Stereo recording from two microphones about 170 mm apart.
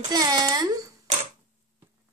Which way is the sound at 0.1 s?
20° right (ahead or behind).